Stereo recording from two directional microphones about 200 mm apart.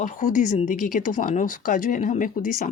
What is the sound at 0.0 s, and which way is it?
A woman's voice, 40° left (ahead or behind).